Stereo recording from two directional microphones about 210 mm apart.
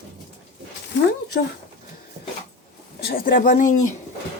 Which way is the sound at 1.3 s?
50° left (ahead or behind).